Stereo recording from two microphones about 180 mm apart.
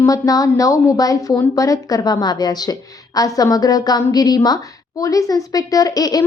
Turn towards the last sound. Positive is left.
turn(degrees=20)  # may be behind; listen again after turning